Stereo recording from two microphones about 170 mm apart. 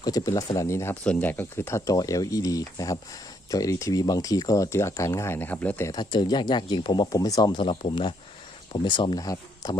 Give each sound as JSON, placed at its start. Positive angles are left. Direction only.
{"t": 0.0, "sound": "speech", "side_deg": 20}